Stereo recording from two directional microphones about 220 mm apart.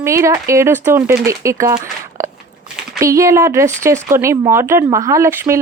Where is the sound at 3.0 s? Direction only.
15° right (ahead or behind).